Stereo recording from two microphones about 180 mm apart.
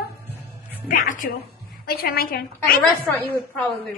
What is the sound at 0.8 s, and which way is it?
A woman's voice, 50° left (ahead or behind).